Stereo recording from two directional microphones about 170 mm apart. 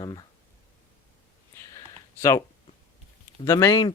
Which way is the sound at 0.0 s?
25° left (ahead or behind).